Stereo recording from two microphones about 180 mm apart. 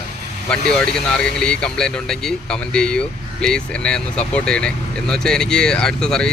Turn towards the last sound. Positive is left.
turn(degrees=5)  # may be behind; listen again after turning